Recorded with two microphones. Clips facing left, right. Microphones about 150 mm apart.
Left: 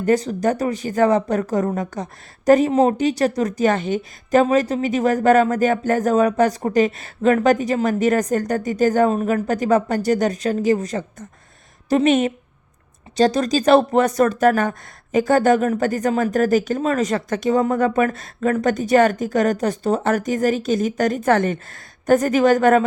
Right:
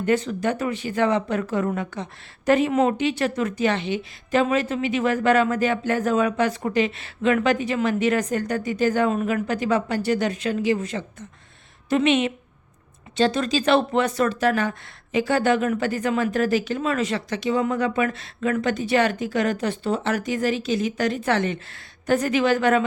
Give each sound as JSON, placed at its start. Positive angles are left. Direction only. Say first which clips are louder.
{"t": 0.0, "sound": "speech", "louder": "left 4 dB", "side_deg": 40}